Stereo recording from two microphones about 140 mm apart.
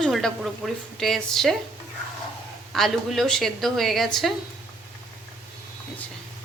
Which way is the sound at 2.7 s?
Centre (ahead or behind).